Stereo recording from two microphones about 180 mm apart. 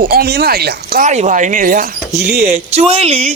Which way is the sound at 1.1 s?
40° right (ahead or behind).